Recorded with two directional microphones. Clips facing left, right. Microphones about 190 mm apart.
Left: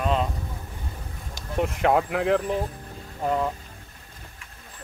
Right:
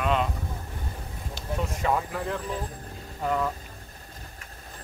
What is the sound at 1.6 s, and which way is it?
Speech, 65° left (ahead or behind).